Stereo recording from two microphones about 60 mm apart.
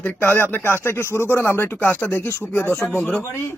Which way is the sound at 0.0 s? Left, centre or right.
Left.